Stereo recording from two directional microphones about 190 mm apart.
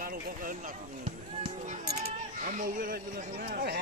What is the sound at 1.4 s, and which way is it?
Speech, 30° right (ahead or behind).